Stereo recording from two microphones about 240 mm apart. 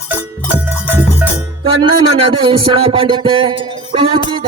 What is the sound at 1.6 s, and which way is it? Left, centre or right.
Music, right.